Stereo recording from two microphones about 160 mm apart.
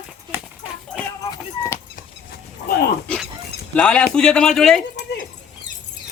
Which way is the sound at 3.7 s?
5° left (ahead or behind).